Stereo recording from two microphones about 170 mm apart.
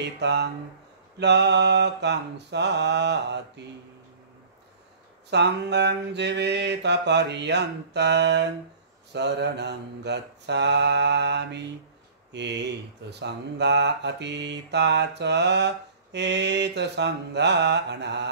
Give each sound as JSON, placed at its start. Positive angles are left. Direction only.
{"t": 0.0, "sound": "speech", "side_deg": -85}
{"t": 5.3, "sound": "speech", "side_deg": -90}